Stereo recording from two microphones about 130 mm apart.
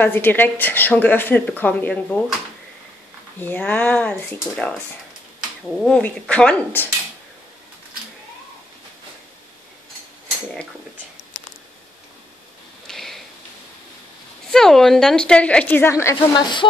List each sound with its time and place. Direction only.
0.0 s a woman's voice: 15° left (ahead or behind)
3.3 s a woman's voice: 15° left (ahead or behind)
12.8 s a sound: centre (ahead or behind)
14.5 s a woman's voice: 5° left (ahead or behind); by 16.3 s 20° left (ahead or behind)
16.3 s speech: 35° left (ahead or behind)